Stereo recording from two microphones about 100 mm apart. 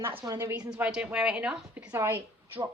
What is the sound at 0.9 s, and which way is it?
Speech, 10° right (ahead or behind).